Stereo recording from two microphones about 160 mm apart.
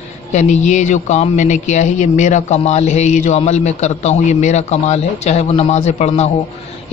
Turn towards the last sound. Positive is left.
turn(degrees=45)  # may be behind; listen again after turning